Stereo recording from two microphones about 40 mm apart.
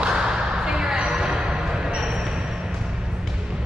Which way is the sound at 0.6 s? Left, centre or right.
Centre.